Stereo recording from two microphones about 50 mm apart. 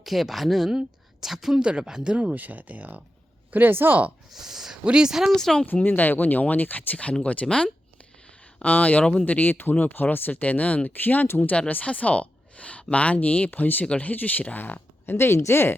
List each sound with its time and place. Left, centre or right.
0.0 s speech: centre
2.1 s speech: right
3.5 s speech: right
4.3 s speech: centre
5.3 s speech: centre
5.8 s speech: left
7.4 s speech: centre
8.6 s speech: left
9.2 s speech: left
10.4 s speech: left
13.8 s speech: left
14.1 s speech: left
15.0 s speech: left